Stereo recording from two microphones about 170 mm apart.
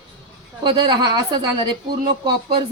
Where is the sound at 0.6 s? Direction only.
25° right (ahead or behind).